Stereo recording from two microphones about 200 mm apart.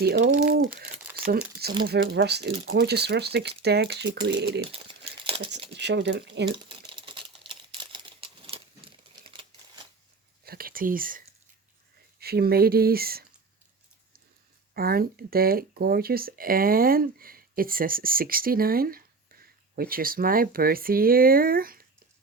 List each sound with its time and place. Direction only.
0.0 s speech: 50° right (ahead or behind)
1.1 s crumpling: 45° right (ahead or behind)
1.9 s speech: 55° right (ahead or behind)
4.7 s crumpling: 30° right (ahead or behind)
5.7 s speech: 60° right (ahead or behind)
6.7 s typing: 25° right (ahead or behind)
7.9 s crumpling: 25° right (ahead or behind)
9.2 s typewriter: 25° right (ahead or behind)
10.4 s speech: 50° right (ahead or behind)
12.2 s speech: 50° right (ahead or behind)
14.7 s speech: 50° right (ahead or behind)